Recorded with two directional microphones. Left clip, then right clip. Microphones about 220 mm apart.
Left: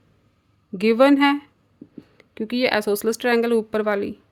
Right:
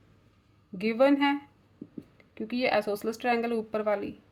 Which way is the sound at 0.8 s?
45° left (ahead or behind).